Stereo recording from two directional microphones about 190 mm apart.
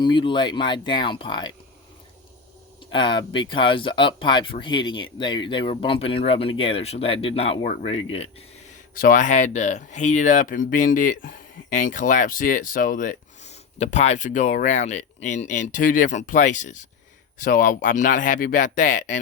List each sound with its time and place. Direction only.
0.0 s speech: 25° left (ahead or behind)
2.9 s speech: 25° left (ahead or behind)
9.0 s speech: 45° left (ahead or behind)